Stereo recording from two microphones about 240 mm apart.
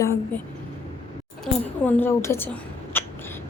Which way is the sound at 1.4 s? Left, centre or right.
Centre.